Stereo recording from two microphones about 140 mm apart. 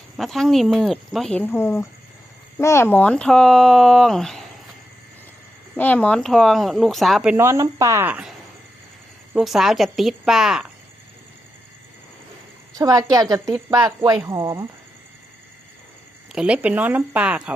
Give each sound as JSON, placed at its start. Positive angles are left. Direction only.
{"t": 0.2, "sound": "speech", "side_deg": 0}
{"t": 5.7, "sound": "speech", "side_deg": 10}
{"t": 7.3, "sound": "speech", "side_deg": -20}
{"t": 9.3, "sound": "speech", "side_deg": 0}
{"t": 12.7, "sound": "speech", "side_deg": -25}
{"t": 16.3, "sound": "speech", "side_deg": -5}